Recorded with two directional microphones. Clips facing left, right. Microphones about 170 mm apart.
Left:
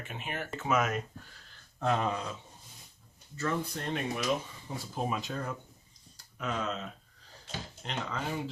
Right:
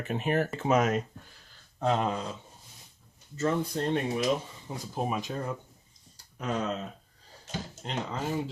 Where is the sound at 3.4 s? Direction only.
25° right (ahead or behind).